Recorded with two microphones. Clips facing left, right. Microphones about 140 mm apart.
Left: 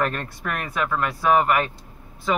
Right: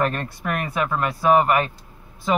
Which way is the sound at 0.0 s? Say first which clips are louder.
Right 2 dB; 20° right (ahead or behind).